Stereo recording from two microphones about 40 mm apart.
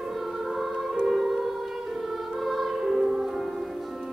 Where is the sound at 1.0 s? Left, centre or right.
Centre.